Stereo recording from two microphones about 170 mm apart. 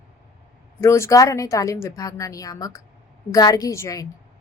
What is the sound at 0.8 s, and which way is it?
A woman's voice, 15° left (ahead or behind).